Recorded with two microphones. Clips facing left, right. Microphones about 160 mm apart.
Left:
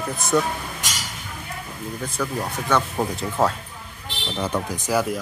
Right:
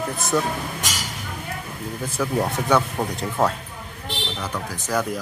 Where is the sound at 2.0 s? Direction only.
5° right (ahead or behind).